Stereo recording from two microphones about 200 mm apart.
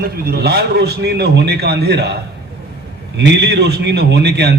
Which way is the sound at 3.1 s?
60° right (ahead or behind).